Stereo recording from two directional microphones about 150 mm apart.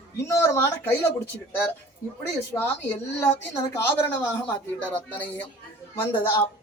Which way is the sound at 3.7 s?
15° left (ahead or behind).